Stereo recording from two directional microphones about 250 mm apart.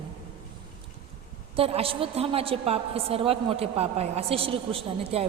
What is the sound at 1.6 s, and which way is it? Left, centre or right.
A woman's voice, right.